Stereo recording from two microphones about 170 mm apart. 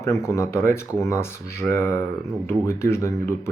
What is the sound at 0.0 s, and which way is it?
Speech, 20° left (ahead or behind).